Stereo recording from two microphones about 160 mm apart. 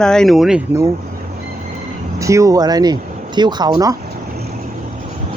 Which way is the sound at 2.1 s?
20° right (ahead or behind).